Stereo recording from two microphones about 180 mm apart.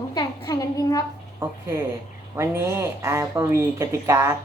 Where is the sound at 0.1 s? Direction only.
20° left (ahead or behind).